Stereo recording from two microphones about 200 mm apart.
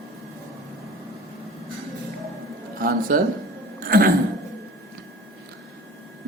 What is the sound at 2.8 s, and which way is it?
Speech, 45° right (ahead or behind).